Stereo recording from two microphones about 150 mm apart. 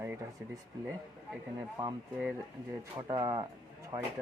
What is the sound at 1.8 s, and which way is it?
Speech, 20° right (ahead or behind).